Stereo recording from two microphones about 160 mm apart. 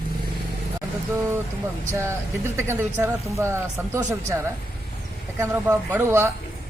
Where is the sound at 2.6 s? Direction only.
15° right (ahead or behind).